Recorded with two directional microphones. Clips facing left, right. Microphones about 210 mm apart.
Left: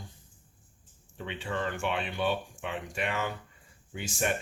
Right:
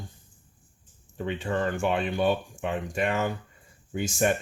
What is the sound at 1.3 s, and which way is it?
Speech, 45° right (ahead or behind).